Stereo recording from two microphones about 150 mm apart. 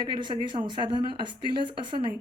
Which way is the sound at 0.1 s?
30° right (ahead or behind).